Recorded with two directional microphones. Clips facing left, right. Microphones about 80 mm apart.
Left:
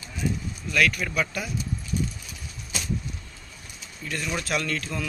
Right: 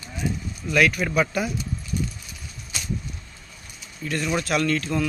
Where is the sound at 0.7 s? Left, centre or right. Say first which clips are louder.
Right 4 dB; centre.